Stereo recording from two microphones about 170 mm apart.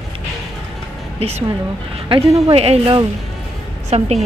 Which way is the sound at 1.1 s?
35° right (ahead or behind).